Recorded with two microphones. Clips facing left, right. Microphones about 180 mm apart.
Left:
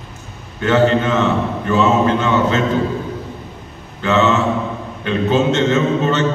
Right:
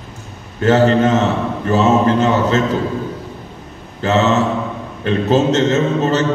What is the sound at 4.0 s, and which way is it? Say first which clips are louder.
A man's voice: right 1 dB; 40° right (ahead or behind).